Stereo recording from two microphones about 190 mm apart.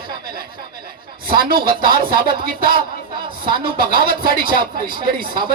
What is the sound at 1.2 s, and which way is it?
A woman's voice, 50° right (ahead or behind).